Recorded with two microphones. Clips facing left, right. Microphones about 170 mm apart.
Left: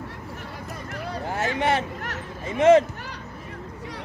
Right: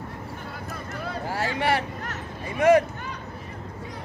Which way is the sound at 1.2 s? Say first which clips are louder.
Left 2 dB; 20° left (ahead or behind).